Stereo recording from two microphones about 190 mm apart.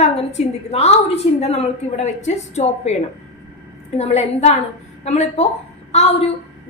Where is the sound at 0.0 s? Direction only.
35° left (ahead or behind).